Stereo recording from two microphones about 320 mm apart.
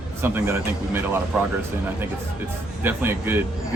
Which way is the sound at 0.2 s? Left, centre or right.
Centre.